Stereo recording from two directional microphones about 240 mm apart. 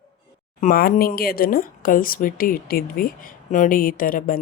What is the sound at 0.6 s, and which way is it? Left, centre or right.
Speech, left.